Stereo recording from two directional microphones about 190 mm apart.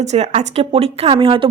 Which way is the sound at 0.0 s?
35° right (ahead or behind).